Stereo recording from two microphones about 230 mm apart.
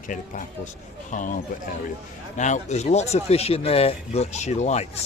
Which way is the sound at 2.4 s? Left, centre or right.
Left.